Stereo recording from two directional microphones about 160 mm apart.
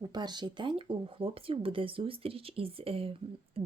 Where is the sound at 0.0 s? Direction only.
25° right (ahead or behind).